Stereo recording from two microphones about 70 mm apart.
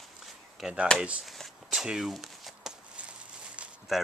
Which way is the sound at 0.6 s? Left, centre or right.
Centre.